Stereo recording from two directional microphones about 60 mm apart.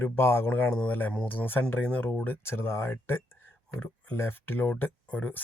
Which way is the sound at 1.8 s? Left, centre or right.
Left.